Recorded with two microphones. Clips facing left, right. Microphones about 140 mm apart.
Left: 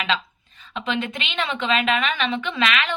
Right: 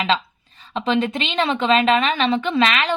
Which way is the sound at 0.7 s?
35° right (ahead or behind).